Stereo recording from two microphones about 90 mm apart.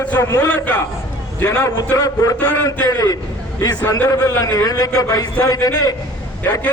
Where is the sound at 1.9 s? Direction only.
40° left (ahead or behind).